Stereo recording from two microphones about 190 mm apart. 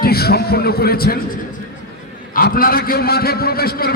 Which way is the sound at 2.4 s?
50° left (ahead or behind).